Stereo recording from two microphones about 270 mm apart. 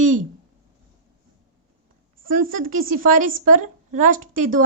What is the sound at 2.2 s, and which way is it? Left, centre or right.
A woman's voice, right.